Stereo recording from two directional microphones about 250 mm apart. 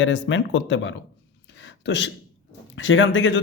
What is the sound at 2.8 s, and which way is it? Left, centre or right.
Speech, left.